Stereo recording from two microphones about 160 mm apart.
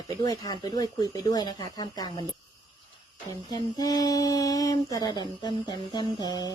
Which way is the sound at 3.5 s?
25° left (ahead or behind).